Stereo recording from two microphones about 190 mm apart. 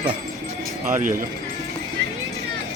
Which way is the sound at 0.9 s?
40° right (ahead or behind).